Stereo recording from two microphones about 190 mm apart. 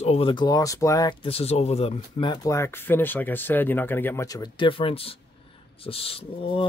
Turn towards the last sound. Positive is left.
turn(degrees=30)  # may be behind; listen again after turning